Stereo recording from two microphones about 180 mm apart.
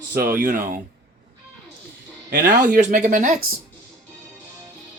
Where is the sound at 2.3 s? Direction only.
50° right (ahead or behind).